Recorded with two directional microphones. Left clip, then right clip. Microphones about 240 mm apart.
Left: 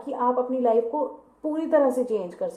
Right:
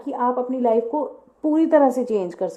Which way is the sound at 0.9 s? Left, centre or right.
Right.